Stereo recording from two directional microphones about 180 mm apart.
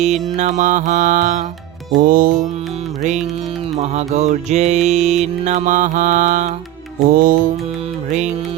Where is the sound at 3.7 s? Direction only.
40° right (ahead or behind).